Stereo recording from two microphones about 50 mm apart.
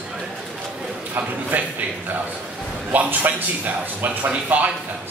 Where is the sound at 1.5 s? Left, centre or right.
Right.